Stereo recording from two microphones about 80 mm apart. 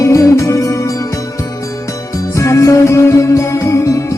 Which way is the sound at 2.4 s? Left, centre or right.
Left.